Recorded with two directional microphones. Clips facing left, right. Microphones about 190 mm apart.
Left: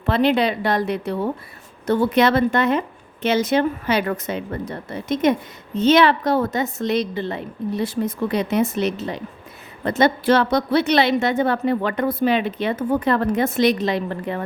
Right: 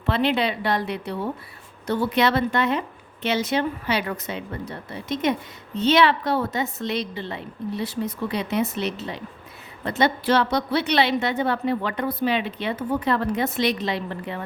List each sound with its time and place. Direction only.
0.0 s a woman's voice: 45° left (ahead or behind)